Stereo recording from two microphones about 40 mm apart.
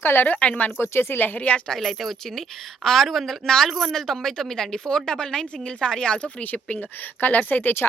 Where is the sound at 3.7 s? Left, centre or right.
Centre.